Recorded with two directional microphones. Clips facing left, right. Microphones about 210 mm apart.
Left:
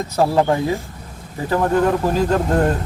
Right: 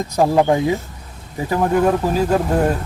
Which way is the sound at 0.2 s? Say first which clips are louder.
Right 2 dB; 15° right (ahead or behind).